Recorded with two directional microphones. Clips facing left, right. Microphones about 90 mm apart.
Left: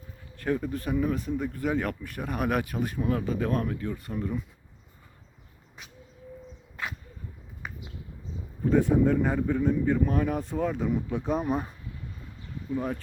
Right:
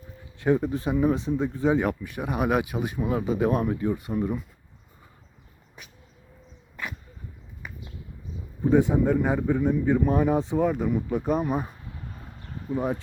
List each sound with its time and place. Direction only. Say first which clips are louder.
0.3 s speech: right 5 dB; 20° right (ahead or behind)
1.8 s a man's voice: right 5 dB; 5° right (ahead or behind)
8.7 s a man's voice: right 1 dB; 15° right (ahead or behind)
12.7 s speech: right 2 dB; 30° right (ahead or behind)